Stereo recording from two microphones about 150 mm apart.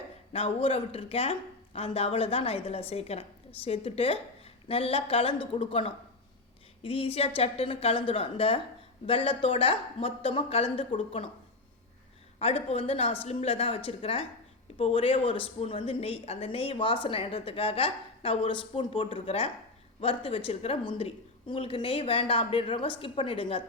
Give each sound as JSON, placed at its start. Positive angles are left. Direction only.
{"t": 0.3, "sound": "speech", "side_deg": 40}
{"t": 12.4, "sound": "speech", "side_deg": 40}